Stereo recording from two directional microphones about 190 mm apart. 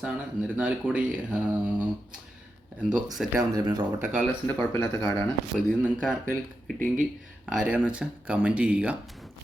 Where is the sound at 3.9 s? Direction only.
10° right (ahead or behind).